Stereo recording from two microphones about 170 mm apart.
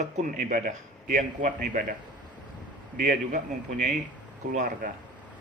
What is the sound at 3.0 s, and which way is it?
A man's voice, 45° right (ahead or behind).